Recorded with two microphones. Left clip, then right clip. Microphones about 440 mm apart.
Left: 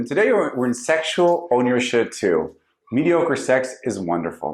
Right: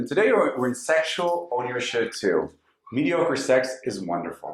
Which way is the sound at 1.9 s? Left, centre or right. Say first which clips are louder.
Left 3 dB; left.